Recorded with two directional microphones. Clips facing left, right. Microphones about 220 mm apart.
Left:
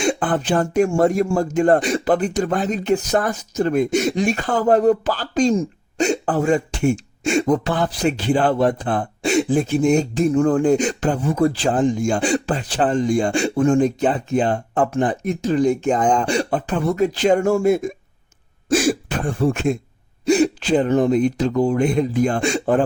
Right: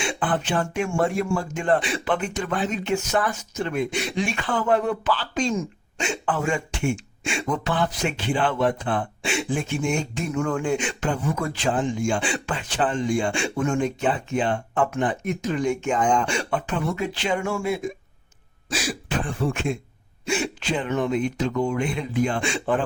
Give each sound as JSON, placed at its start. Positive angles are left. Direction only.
{"t": 0.0, "sound": "a man's voice", "side_deg": 45}